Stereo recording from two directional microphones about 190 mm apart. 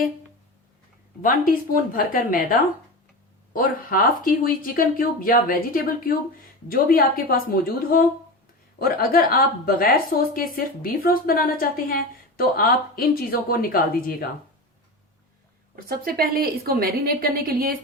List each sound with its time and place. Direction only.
1.2 s a woman's voice: 50° left (ahead or behind)
15.7 s a woman's voice: 50° right (ahead or behind)